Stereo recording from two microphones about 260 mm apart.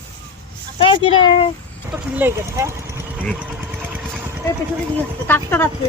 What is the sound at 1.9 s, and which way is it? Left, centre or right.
Speech, centre.